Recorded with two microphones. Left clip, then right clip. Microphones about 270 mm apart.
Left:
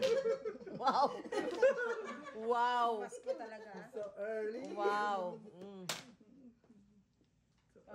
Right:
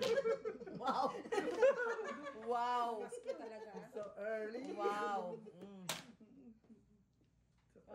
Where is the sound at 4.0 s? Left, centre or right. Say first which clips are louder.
Left 3 dB; centre.